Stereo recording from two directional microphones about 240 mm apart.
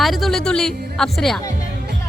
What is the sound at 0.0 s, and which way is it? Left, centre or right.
A woman's voice, centre.